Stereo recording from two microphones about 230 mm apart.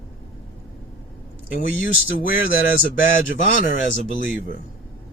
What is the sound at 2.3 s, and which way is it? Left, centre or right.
Speech, left.